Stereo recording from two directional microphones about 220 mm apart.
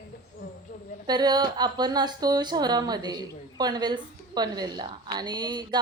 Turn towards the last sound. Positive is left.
turn(degrees=-20)  # may be behind; listen again after turning